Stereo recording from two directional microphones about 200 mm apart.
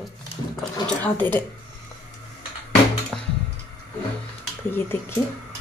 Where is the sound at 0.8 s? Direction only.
10° left (ahead or behind).